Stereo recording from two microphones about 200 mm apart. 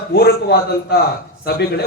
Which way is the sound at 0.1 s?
50° left (ahead or behind).